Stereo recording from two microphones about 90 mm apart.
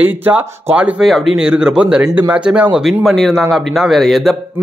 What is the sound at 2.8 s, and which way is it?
Speech, centre (ahead or behind).